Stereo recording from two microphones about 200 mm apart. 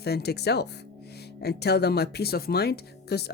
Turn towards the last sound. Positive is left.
turn(degrees=55)  # may be behind; listen again after turning